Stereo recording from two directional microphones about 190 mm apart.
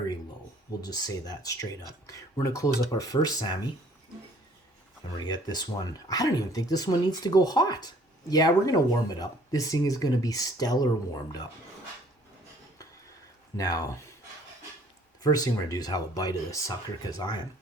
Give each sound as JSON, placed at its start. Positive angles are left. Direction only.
{"t": 0.8, "sound": "speech", "side_deg": 20}
{"t": 5.1, "sound": "speech", "side_deg": 20}
{"t": 13.6, "sound": "speech", "side_deg": 20}
{"t": 15.2, "sound": "speech", "side_deg": 20}